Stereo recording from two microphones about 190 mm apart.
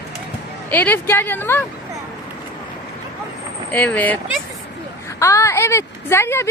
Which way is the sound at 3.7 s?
10° left (ahead or behind).